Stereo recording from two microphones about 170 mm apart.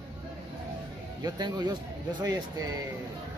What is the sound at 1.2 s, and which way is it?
Speech, 25° right (ahead or behind).